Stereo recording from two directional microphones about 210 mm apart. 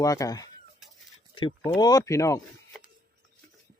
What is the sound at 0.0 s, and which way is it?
Speech, 15° left (ahead or behind).